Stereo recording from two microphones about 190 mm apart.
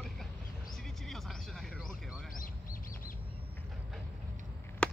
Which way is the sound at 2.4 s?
45° left (ahead or behind).